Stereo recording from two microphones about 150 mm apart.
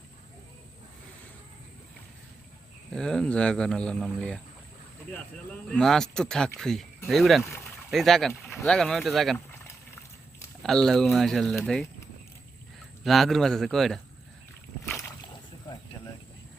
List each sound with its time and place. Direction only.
2.9 s speech: 5° left (ahead or behind)
7.4 s speech: 15° left (ahead or behind)
7.9 s speech: centre (ahead or behind)
9.5 s boiling: 15° left (ahead or behind)
10.6 s speech: centre (ahead or behind)
13.1 s speech: centre (ahead or behind)
14.8 s boat: 15° left (ahead or behind)